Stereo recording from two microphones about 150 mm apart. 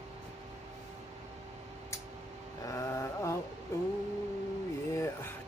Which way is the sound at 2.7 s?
20° left (ahead or behind).